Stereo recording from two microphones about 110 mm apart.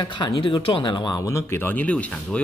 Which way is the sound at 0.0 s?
45° left (ahead or behind).